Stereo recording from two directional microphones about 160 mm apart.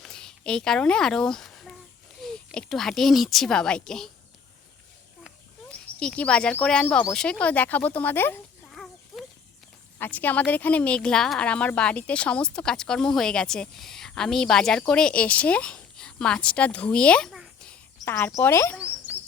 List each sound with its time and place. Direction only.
0.0 s a child's voice: 5° left (ahead or behind)
5.2 s speech: 5° left (ahead or behind)
8.7 s fowl: centre (ahead or behind)
10.0 s a woman's voice: 10° left (ahead or behind)
18.0 s speech: 15° left (ahead or behind)
19.1 s cricket: 10° right (ahead or behind)